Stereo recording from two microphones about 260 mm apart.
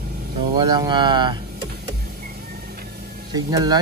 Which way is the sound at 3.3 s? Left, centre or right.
Centre.